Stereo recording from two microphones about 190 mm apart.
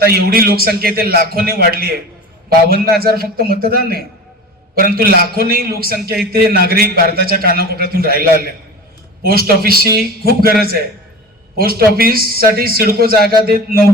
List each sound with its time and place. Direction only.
0.0 s a man's voice: 55° right (ahead or behind)